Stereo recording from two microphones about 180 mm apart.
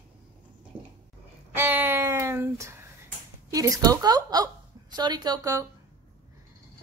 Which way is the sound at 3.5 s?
20° right (ahead or behind).